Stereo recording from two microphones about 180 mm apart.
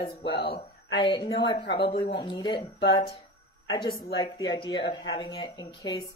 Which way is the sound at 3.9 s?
60° left (ahead or behind).